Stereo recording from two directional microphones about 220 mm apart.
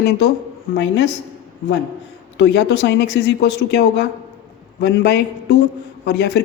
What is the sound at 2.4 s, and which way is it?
Speech, 50° left (ahead or behind).